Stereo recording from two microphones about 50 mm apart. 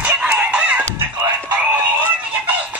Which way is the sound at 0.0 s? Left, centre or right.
Right.